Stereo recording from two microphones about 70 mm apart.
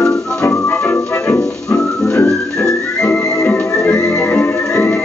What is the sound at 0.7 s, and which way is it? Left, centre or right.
Music, left.